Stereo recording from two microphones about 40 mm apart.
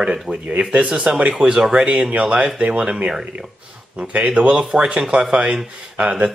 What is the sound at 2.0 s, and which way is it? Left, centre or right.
Speech, right.